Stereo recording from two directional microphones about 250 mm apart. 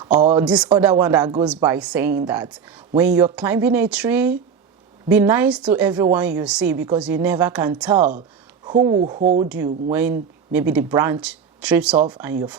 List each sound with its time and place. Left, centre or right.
0.3 s a woman's voice: centre
8.6 s speech: centre
9.2 s speech: right
9.9 s speech: centre